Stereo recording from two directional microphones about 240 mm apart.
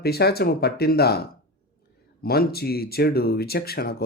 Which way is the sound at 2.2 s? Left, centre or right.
Left.